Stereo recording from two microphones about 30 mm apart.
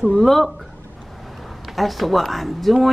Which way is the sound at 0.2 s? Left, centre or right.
Centre.